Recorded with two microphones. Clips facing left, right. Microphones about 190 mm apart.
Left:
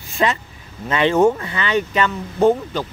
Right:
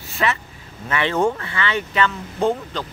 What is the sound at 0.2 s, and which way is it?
Speech, 25° left (ahead or behind).